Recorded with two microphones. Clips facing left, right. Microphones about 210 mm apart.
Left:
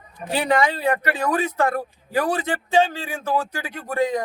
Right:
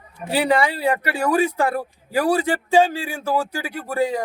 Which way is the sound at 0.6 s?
10° right (ahead or behind).